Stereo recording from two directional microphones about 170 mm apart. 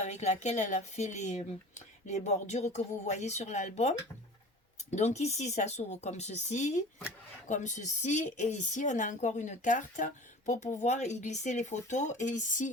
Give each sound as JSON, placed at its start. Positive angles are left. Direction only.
{"t": 0.0, "sound": "speech", "side_deg": 40}